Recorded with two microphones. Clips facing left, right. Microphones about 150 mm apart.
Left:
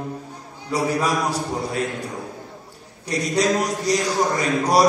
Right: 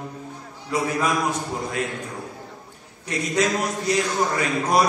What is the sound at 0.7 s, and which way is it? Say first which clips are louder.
A man's voice: left 2 dB; 35° left (ahead or behind).